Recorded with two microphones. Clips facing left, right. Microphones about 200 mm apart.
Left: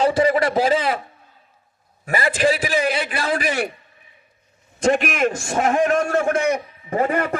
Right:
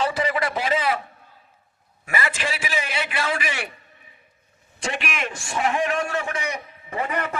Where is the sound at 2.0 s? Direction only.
35° left (ahead or behind).